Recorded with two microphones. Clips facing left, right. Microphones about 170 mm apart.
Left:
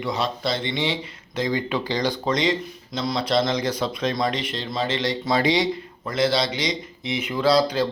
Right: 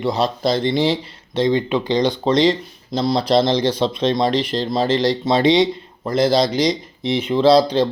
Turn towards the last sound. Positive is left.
turn(degrees=-35)  # may be behind; listen again after turning